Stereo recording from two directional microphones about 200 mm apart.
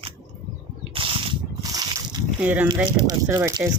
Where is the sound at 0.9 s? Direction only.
25° right (ahead or behind).